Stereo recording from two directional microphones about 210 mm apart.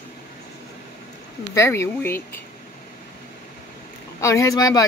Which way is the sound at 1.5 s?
10° left (ahead or behind).